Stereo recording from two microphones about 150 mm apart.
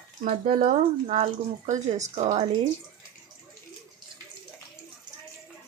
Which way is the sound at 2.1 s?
50° right (ahead or behind).